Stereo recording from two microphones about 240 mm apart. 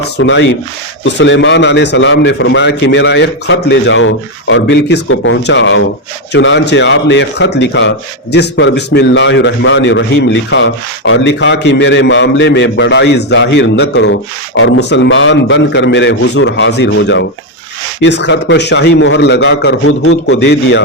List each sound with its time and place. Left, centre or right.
0.2 s a man's voice: left